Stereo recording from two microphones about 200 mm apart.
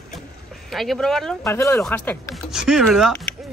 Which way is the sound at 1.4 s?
15° left (ahead or behind).